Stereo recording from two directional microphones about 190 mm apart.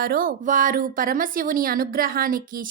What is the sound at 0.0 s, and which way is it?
Speech, 50° right (ahead or behind).